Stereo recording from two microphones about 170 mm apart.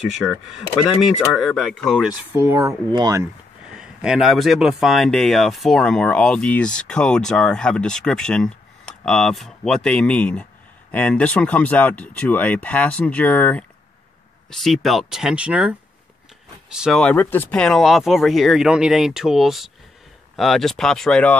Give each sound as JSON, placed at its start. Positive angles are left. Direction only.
{"t": 1.8, "sound": "speech", "side_deg": 0}
{"t": 3.7, "sound": "speech", "side_deg": -5}
{"t": 16.7, "sound": "speech", "side_deg": 0}